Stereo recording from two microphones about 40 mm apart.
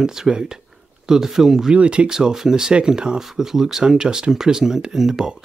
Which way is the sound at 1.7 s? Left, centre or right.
Right.